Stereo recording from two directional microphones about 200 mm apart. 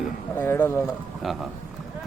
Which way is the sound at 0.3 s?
10° left (ahead or behind).